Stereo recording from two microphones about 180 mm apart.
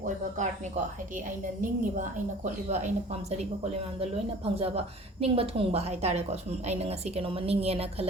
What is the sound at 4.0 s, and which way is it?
Speech, 35° right (ahead or behind).